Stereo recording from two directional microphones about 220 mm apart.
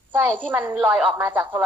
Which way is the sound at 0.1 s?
5° right (ahead or behind).